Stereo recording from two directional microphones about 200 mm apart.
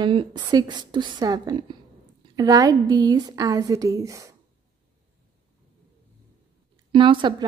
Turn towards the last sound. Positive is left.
turn(degrees=-25)  # may be behind; listen again after turning